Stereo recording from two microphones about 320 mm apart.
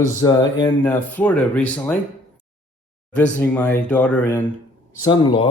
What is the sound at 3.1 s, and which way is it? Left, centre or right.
Speech, centre.